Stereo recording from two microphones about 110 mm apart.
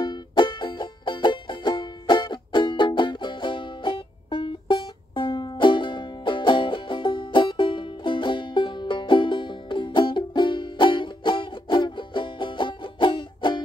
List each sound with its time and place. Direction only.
0.0 s music: 45° left (ahead or behind)